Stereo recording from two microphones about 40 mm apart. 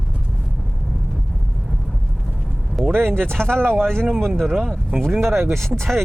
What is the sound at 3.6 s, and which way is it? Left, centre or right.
Speech, right.